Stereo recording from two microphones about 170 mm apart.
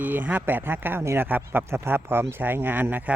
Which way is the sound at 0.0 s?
10° right (ahead or behind).